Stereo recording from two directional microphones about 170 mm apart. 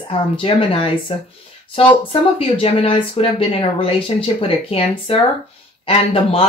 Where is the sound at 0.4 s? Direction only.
30° left (ahead or behind).